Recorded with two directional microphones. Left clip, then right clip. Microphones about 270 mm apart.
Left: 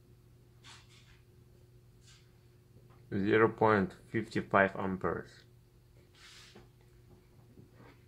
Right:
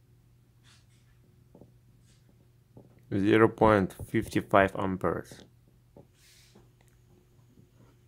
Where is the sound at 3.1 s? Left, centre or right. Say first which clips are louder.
Right 5 dB; right.